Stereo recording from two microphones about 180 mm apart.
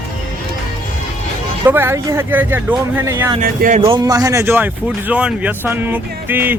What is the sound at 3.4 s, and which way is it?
Speech, 50° right (ahead or behind).